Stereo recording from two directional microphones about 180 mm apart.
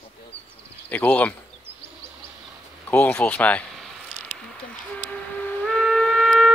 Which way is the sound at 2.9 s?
10° left (ahead or behind).